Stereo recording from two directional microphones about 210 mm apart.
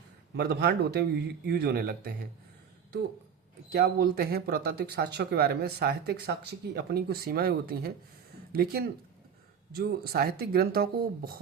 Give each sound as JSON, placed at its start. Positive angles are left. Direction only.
{"t": 0.3, "sound": "speech", "side_deg": -50}
{"t": 3.7, "sound": "speech", "side_deg": -45}